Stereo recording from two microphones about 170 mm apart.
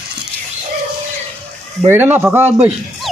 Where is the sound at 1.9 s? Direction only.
10° right (ahead or behind).